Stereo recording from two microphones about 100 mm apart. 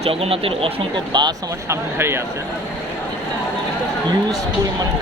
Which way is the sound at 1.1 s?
50° right (ahead or behind).